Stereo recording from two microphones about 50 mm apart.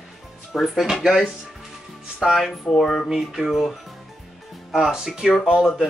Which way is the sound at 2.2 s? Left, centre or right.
Centre.